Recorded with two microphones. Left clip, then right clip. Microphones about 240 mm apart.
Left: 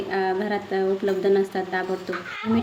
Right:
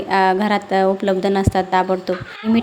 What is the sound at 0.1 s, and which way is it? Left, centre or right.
Speech, right.